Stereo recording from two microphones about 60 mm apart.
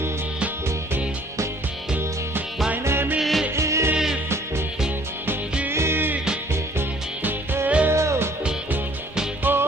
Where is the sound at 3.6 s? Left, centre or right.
Right.